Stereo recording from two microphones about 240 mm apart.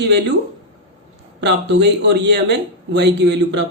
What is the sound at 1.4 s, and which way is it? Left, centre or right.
A man's voice, right.